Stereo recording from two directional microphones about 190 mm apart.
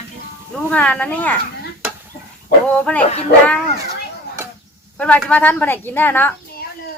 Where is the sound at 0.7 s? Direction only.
5° left (ahead or behind).